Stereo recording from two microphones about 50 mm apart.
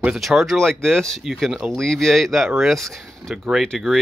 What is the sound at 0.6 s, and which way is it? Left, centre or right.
Speech, centre.